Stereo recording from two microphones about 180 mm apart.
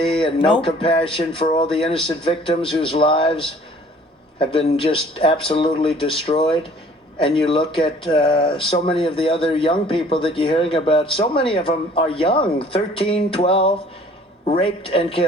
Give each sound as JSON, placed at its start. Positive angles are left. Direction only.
{"t": 0.0, "sound": "speech", "side_deg": 30}
{"t": 0.6, "sound": "a sound", "side_deg": 30}
{"t": 2.0, "sound": "speech", "side_deg": 30}